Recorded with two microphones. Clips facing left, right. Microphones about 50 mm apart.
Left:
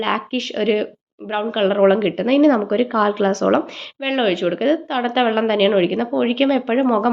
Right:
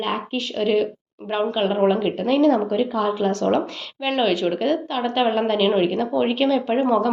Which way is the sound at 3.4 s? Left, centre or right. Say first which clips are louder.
Left 3 dB; left.